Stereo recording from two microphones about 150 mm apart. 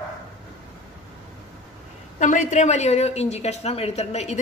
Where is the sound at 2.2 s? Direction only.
55° left (ahead or behind).